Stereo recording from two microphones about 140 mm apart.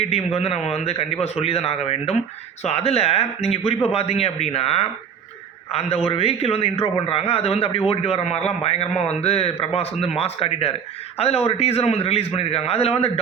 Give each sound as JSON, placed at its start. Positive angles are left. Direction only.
{"t": 0.0, "sound": "a man's voice", "side_deg": 50}